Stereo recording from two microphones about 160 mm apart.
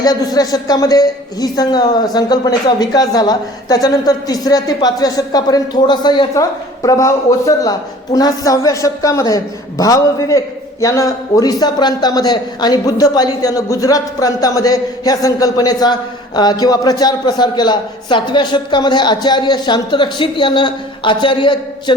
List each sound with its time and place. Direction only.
0.0 s a man's voice: 25° left (ahead or behind)